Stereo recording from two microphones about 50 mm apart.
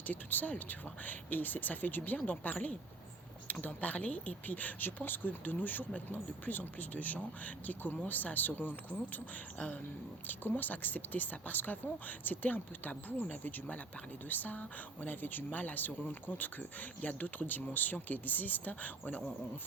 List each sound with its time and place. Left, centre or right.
0.1 s speech: left
10.2 s speech: left